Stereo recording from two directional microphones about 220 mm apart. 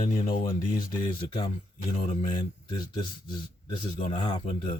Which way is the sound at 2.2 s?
20° left (ahead or behind).